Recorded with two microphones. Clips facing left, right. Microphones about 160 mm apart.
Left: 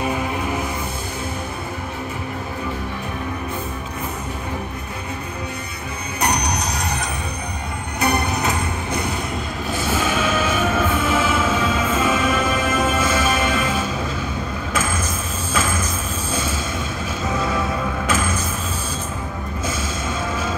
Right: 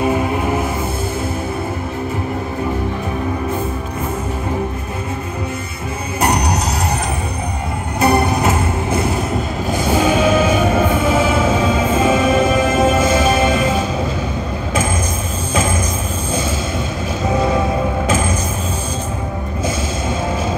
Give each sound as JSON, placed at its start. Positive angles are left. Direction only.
{"t": 6.2, "sound": "music", "side_deg": -25}
{"t": 8.0, "sound": "music", "side_deg": -30}
{"t": 9.9, "sound": "a sound", "side_deg": -35}
{"t": 10.3, "sound": "music", "side_deg": -30}
{"t": 17.5, "sound": "music", "side_deg": -30}